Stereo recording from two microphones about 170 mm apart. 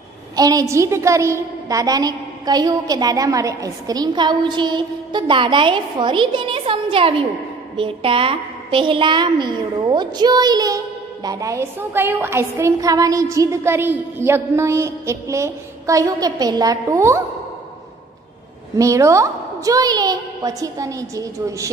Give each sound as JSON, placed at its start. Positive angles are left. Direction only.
{"t": 0.4, "sound": "a woman's voice", "side_deg": -20}
{"t": 18.8, "sound": "a woman's voice", "side_deg": -20}